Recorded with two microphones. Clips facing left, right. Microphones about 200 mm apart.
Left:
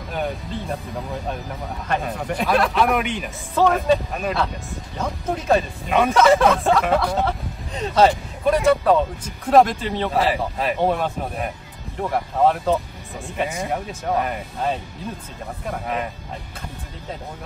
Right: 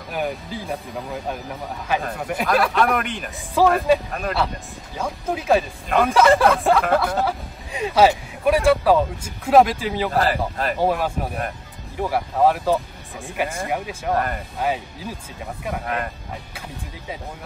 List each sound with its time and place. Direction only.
0.1 s speech: centre (ahead or behind)
1.9 s speech: centre (ahead or behind)